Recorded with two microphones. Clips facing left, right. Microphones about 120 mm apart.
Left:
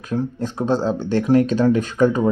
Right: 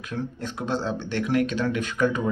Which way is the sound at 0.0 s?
40° left (ahead or behind).